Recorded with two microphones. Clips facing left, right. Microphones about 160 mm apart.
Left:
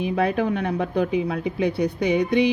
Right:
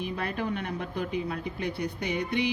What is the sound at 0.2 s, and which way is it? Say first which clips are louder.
Speech: left 12 dB; 90° left.